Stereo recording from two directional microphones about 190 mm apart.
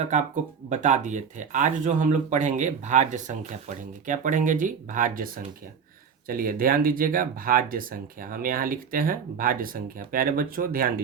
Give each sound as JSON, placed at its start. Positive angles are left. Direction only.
{"t": 0.0, "sound": "speech", "side_deg": -40}